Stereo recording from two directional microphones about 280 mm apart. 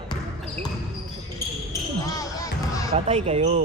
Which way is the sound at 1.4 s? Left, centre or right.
Centre.